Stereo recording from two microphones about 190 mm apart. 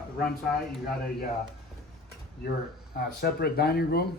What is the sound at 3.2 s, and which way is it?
Speech, 55° left (ahead or behind).